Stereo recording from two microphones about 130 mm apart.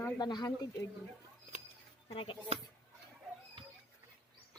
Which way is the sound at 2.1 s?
45° left (ahead or behind).